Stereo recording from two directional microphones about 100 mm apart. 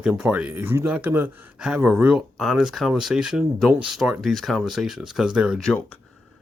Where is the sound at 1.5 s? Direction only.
10° right (ahead or behind).